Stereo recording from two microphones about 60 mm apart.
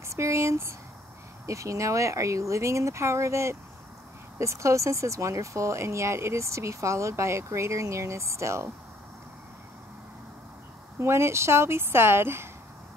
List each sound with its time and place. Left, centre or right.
0.1 s speech: right
11.0 s a woman's voice: right